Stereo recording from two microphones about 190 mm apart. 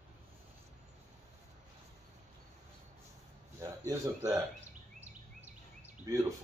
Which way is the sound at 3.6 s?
15° right (ahead or behind).